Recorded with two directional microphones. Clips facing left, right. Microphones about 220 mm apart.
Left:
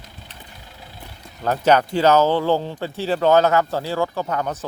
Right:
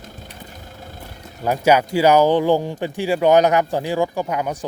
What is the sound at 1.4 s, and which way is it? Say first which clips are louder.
Speech: right 1 dB; 10° right (ahead or behind).